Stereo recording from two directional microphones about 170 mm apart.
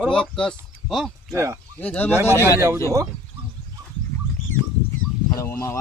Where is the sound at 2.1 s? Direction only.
15° right (ahead or behind).